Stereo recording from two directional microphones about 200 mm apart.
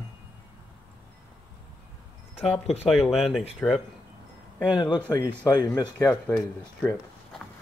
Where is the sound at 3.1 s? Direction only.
Centre (ahead or behind).